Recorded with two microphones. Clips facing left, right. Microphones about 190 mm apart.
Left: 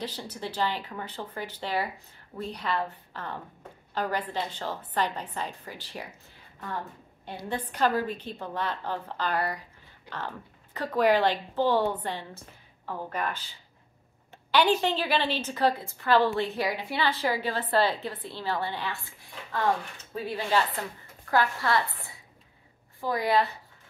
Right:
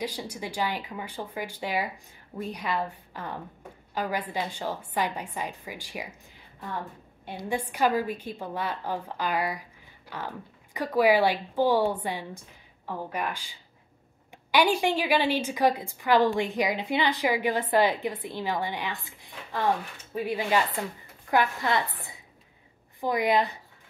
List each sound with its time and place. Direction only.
0.0 s a woman's voice: 10° right (ahead or behind)
7.2 s a woman's voice: 10° right (ahead or behind)
22.9 s a woman's voice: 20° right (ahead or behind)